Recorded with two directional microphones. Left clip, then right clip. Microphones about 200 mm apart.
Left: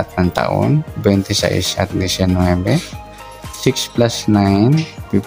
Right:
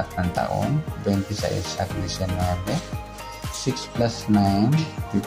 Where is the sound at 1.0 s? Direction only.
55° left (ahead or behind).